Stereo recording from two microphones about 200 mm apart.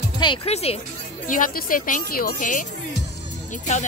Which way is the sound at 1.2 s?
40° left (ahead or behind).